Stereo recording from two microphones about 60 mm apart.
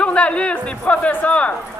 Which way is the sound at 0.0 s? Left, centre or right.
Centre.